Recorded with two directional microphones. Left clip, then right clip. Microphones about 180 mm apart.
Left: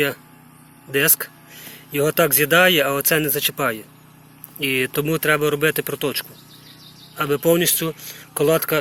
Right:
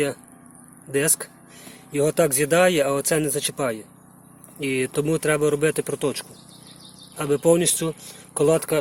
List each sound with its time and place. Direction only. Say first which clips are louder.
0.9 s speech: left 4 dB; 5° right (ahead or behind)